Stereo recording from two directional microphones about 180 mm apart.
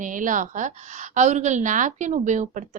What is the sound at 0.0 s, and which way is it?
A woman's voice, 45° right (ahead or behind).